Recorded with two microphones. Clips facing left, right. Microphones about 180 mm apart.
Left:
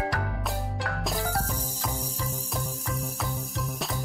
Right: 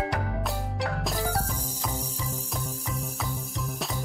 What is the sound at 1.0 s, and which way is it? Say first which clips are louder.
Music: left 3 dB; centre (ahead or behind).